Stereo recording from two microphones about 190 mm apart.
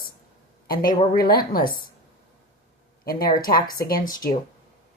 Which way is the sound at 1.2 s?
50° left (ahead or behind).